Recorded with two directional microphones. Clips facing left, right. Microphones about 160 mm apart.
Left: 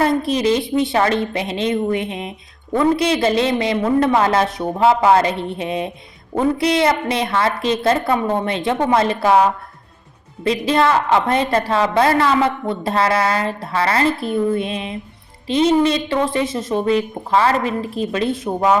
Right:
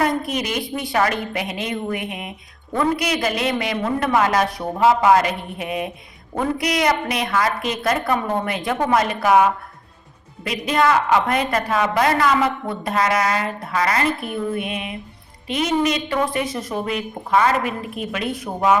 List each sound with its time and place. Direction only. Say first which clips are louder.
0.0 s a woman's voice: left 5 dB; 30° left (ahead or behind)